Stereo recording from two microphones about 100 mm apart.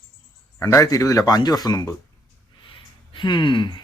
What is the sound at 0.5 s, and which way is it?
A man's voice, 25° left (ahead or behind).